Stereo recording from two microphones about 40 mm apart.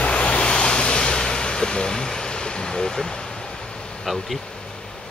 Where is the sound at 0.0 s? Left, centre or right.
Left.